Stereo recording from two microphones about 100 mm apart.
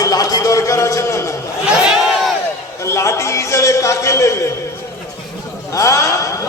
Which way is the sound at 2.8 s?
30° left (ahead or behind).